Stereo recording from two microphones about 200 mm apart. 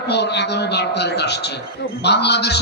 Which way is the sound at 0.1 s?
55° left (ahead or behind).